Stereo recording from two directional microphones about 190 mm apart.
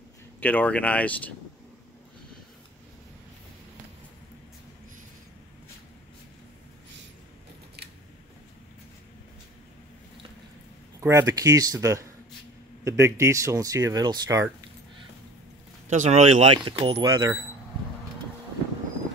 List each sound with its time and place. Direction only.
0.4 s speech: 10° left (ahead or behind)
11.0 s speech: 15° right (ahead or behind)
15.9 s speech: 40° right (ahead or behind)
16.5 s speech: 25° right (ahead or behind)